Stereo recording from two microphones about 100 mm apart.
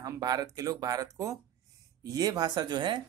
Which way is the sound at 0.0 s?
40° right (ahead or behind).